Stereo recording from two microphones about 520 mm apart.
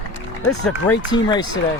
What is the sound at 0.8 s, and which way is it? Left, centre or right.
Speech, centre.